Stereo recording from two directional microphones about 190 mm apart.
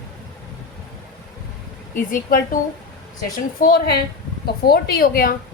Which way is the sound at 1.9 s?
45° left (ahead or behind).